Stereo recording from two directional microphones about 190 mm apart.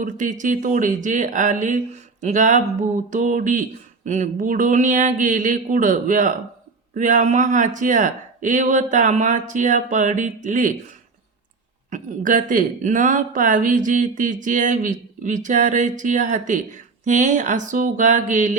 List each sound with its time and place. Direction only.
0.0 s speech: 40° right (ahead or behind)
11.9 s speech: 40° right (ahead or behind)